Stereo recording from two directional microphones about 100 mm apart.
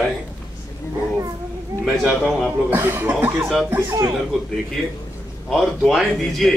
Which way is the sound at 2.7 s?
20° right (ahead or behind).